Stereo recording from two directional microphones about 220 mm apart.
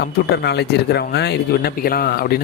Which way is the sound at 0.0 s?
50° left (ahead or behind).